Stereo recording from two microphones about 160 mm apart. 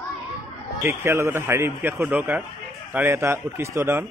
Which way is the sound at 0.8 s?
15° right (ahead or behind).